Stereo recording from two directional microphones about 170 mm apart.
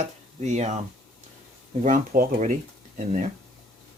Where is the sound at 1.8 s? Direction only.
50° right (ahead or behind).